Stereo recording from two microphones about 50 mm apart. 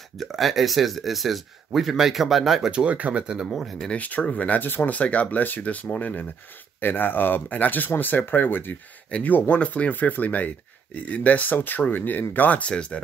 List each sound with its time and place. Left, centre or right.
0.2 s speech: centre
2.7 s speech: right
3.4 s speech: centre
3.9 s speech: left
4.9 s speech: left
6.8 s speech: left
9.1 s speech: left